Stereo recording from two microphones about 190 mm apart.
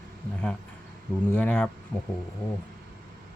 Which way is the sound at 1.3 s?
10° left (ahead or behind).